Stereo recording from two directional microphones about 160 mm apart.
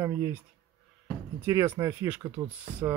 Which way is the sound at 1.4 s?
15° right (ahead or behind).